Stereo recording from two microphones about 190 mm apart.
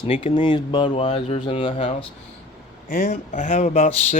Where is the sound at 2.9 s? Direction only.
45° left (ahead or behind).